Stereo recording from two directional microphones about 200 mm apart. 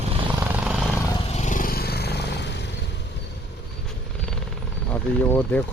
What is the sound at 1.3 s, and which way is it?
Vehicle, 35° left (ahead or behind).